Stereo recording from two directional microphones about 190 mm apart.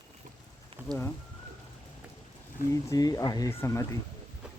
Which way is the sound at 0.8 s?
10° right (ahead or behind).